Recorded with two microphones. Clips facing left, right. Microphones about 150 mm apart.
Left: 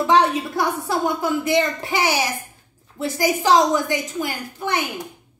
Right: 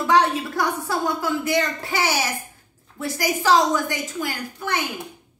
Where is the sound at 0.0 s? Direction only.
20° left (ahead or behind).